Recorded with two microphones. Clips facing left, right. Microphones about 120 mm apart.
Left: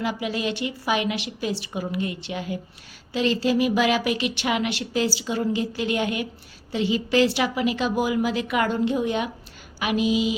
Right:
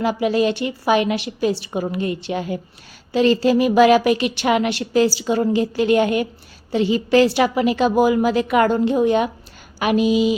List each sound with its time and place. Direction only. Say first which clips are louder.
0.0 s a woman's voice: right 8 dB; 45° right (ahead or behind)